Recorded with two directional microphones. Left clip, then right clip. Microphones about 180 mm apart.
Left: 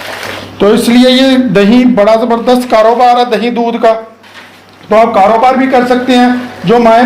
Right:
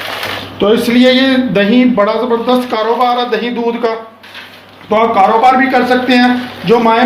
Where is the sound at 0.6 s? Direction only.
50° left (ahead or behind).